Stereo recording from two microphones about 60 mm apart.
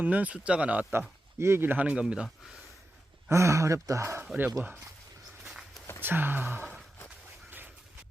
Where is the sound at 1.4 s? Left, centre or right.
Right.